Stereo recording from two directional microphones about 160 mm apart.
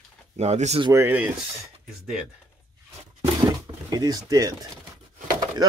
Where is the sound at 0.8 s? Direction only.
15° right (ahead or behind).